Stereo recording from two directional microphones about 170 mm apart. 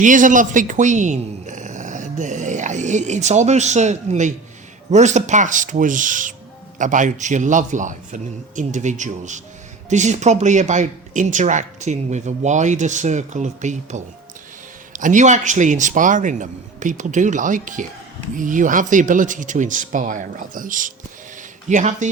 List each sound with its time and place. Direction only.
0.0 s a man's voice: 50° right (ahead or behind)